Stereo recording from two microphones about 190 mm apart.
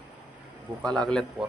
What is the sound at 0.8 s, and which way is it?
Speech, 5° left (ahead or behind).